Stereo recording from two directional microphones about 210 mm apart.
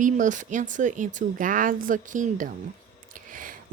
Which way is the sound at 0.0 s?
35° right (ahead or behind).